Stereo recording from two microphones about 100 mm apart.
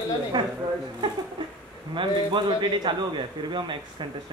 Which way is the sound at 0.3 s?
50° right (ahead or behind).